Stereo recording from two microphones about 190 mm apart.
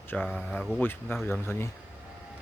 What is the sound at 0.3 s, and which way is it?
Speech, 5° left (ahead or behind).